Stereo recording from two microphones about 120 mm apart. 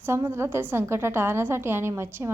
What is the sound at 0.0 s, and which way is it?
A woman's voice, 20° right (ahead or behind).